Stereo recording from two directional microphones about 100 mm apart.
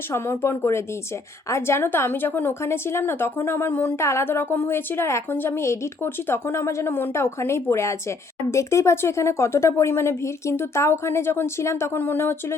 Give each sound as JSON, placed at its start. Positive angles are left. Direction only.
{"t": 0.1, "sound": "a woman's voice", "side_deg": 25}